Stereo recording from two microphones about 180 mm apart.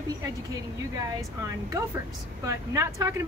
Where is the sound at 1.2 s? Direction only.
20° right (ahead or behind).